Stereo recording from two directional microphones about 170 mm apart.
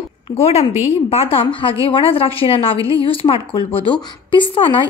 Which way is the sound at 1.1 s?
35° left (ahead or behind).